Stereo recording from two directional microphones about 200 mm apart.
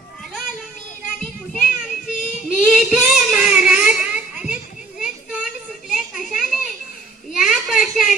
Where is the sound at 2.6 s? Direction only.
5° right (ahead or behind).